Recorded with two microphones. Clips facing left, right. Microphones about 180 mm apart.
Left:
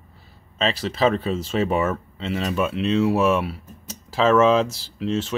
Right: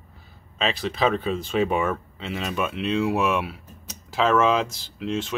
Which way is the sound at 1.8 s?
Centre (ahead or behind).